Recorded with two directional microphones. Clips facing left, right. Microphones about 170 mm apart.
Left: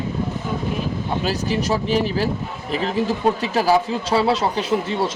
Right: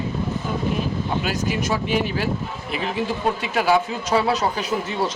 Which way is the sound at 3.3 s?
35° left (ahead or behind).